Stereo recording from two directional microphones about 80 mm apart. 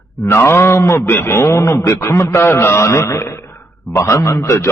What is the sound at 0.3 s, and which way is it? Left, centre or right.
A man's voice, left.